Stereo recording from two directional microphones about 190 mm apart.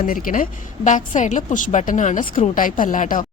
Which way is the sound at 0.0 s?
45° left (ahead or behind).